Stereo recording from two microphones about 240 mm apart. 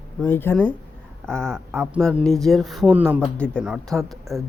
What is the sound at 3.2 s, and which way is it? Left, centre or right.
Speech, centre.